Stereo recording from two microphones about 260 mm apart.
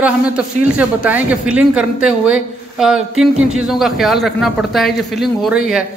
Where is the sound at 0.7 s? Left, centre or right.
Centre.